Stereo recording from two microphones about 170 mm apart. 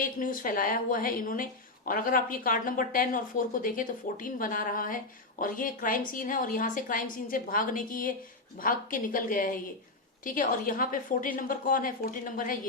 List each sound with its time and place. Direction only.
0.2 s a woman's voice: 55° left (ahead or behind)